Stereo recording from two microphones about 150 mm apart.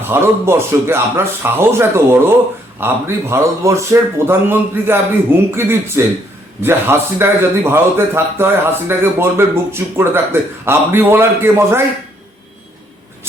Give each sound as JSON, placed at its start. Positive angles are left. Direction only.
{"t": 0.1, "sound": "speech", "side_deg": -15}